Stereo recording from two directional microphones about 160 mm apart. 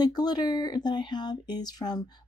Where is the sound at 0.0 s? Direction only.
25° left (ahead or behind).